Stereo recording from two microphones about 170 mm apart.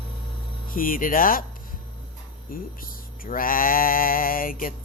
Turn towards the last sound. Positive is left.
turn(degrees=55)  # may be behind; listen again after turning